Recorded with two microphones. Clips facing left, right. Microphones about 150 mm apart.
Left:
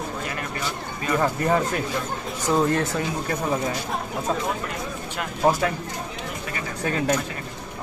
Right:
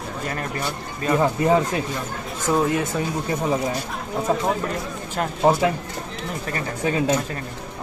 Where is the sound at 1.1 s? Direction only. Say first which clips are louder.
Right 3 dB; 15° right (ahead or behind).